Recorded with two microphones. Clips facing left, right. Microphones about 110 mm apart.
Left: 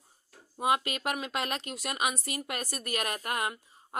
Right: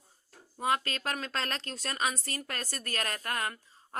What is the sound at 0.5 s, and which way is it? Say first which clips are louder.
A woman's voice: left 2 dB; 15° left (ahead or behind).